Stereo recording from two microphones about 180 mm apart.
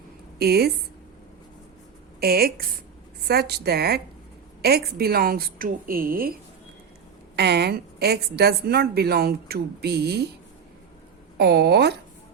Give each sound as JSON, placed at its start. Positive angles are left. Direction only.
{"t": 0.3, "sound": "a woman's voice", "side_deg": -60}
{"t": 2.2, "sound": "a woman's voice", "side_deg": -55}
{"t": 7.3, "sound": "a woman's voice", "side_deg": -65}
{"t": 11.3, "sound": "a woman's voice", "side_deg": -65}